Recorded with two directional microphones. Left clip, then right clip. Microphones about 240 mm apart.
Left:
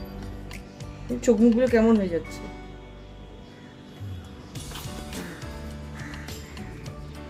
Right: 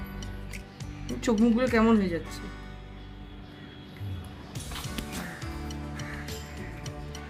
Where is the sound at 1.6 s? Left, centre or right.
Centre.